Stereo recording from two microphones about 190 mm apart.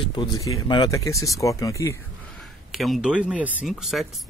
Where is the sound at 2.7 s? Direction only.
Centre (ahead or behind).